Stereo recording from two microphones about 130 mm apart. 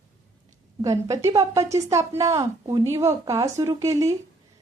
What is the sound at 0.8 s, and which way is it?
Speech, 25° right (ahead or behind).